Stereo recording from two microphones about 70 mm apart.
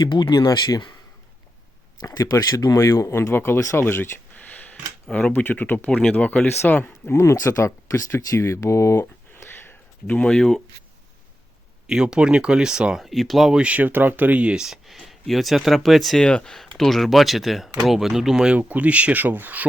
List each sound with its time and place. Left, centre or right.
0.0 s speech: left
0.3 s speech: left
2.0 s speech: left
4.4 s a sound: left
5.1 s speech: left
7.1 s speech: left
9.4 s a sound: left
10.1 s speech: centre
11.9 s speech: centre